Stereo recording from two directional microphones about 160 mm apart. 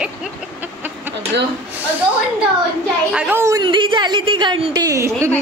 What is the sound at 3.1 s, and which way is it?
Speech, 5° right (ahead or behind).